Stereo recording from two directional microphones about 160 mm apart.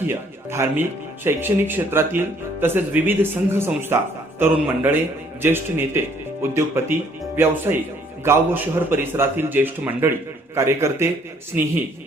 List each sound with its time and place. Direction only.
0.0 s speech: 15° right (ahead or behind)